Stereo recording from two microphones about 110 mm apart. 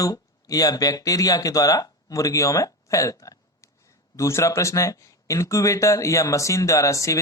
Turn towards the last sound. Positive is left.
turn(degrees=30)  # may be behind; listen again after turning